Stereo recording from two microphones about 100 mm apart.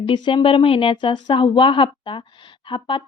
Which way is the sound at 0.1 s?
55° left (ahead or behind).